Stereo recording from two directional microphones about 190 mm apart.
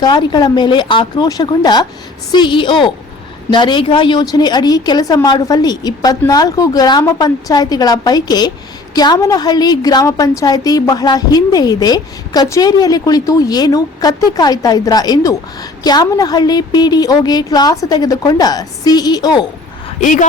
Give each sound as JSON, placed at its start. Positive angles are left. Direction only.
{"t": 0.0, "sound": "a woman's voice", "side_deg": 25}
{"t": 20.0, "sound": "speech", "side_deg": 40}